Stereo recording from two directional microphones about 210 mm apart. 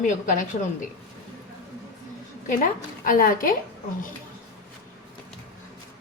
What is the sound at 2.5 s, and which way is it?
A woman's voice, 40° left (ahead or behind).